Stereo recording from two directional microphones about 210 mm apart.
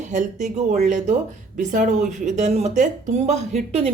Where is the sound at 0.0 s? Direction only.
35° right (ahead or behind).